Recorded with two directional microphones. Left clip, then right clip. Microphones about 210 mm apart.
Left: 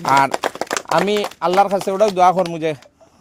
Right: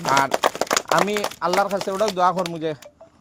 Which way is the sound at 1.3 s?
50° left (ahead or behind).